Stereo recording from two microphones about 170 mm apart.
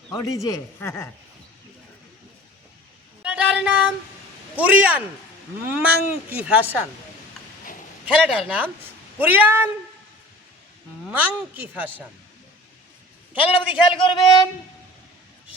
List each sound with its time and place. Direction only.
0.1 s a man's voice: 20° left (ahead or behind)
3.3 s a sound: 5° right (ahead or behind)
4.5 s speech: 10° right (ahead or behind)
8.0 s speech: 5° right (ahead or behind)
11.1 s speech: 10° right (ahead or behind)
13.4 s a man's voice: 30° left (ahead or behind)